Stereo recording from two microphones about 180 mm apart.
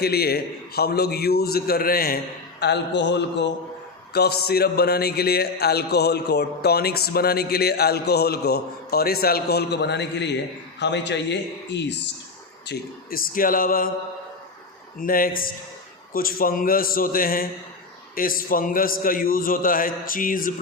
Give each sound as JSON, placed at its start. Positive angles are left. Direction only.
{"t": 0.0, "sound": "a man's voice", "side_deg": 60}
{"t": 2.6, "sound": "a man's voice", "side_deg": 70}
{"t": 4.1, "sound": "a man's voice", "side_deg": 65}
{"t": 12.6, "sound": "a man's voice", "side_deg": 60}
{"t": 14.9, "sound": "a man's voice", "side_deg": 50}